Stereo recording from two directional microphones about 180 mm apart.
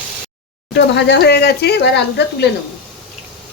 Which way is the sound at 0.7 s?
75° left (ahead or behind).